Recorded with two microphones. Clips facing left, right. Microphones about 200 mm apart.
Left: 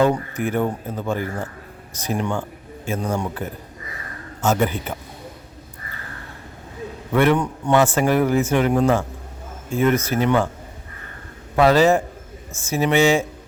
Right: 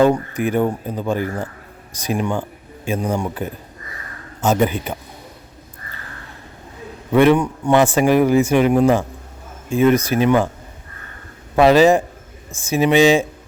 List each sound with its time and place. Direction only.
0.0 s a man's voice: 15° right (ahead or behind)
7.1 s speech: 15° right (ahead or behind)
11.5 s speech: 15° right (ahead or behind)